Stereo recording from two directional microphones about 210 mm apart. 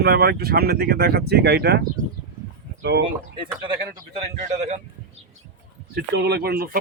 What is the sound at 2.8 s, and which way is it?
Speech, 50° right (ahead or behind).